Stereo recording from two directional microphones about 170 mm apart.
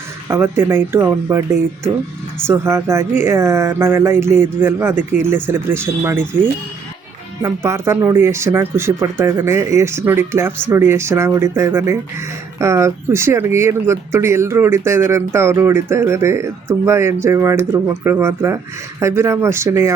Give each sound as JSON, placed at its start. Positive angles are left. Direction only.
{"t": 0.3, "sound": "speech", "side_deg": -15}
{"t": 2.5, "sound": "speech", "side_deg": -15}